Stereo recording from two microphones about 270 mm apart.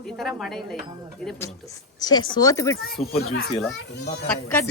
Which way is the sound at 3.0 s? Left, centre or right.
Left.